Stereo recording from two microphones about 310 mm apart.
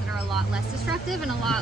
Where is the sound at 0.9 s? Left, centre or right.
Centre.